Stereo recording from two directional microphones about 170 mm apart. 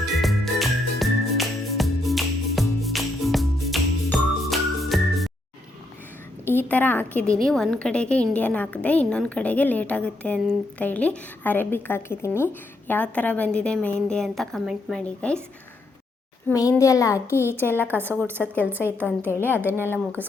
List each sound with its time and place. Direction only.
0.0 s music: centre (ahead or behind)
6.7 s a woman's voice: 10° left (ahead or behind)
16.5 s a child's voice: 20° left (ahead or behind)
18.3 s a woman's voice: 10° right (ahead or behind)
20.2 s a woman's voice: 10° left (ahead or behind)